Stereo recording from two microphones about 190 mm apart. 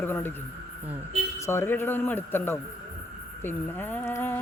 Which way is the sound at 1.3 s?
15° left (ahead or behind).